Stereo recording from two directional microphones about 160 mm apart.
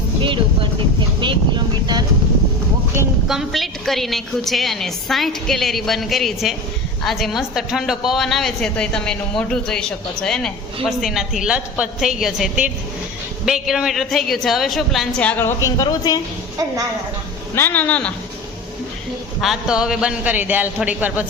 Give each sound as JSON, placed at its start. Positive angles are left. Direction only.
{"t": 0.2, "sound": "speech", "side_deg": -30}
{"t": 3.2, "sound": "a woman's voice", "side_deg": 0}
{"t": 17.5, "sound": "speech", "side_deg": 15}
{"t": 19.4, "sound": "a man's voice", "side_deg": -5}